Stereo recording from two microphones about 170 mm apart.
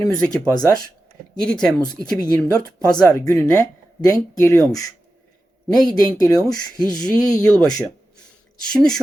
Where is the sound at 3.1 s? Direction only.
20° left (ahead or behind).